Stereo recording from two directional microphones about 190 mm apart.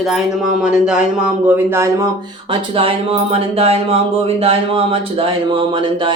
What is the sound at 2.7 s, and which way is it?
Speech, 30° right (ahead or behind).